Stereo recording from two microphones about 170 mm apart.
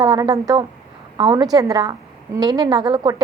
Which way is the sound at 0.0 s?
20° right (ahead or behind).